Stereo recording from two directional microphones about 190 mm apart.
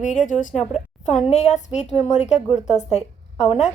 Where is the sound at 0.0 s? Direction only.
40° left (ahead or behind).